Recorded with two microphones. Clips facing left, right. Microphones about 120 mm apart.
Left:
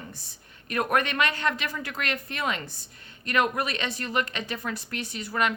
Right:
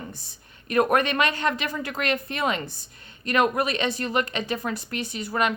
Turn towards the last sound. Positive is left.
turn(degrees=-20)  # may be behind; listen again after turning